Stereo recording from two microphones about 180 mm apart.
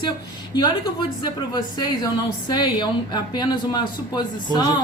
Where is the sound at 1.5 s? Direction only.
20° left (ahead or behind).